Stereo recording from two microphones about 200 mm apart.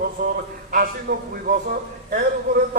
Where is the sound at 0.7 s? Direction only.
45° right (ahead or behind).